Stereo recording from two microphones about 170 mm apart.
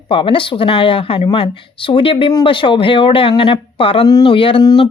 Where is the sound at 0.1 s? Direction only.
30° left (ahead or behind).